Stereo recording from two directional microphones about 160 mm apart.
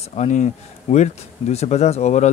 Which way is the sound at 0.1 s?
45° left (ahead or behind).